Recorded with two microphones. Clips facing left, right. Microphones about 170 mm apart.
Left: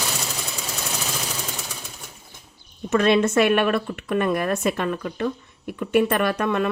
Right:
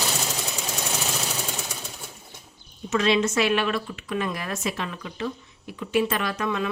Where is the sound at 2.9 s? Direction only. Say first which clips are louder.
Left 4 dB; 55° left (ahead or behind).